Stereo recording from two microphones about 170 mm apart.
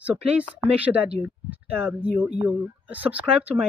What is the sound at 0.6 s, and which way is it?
Speech, 35° right (ahead or behind).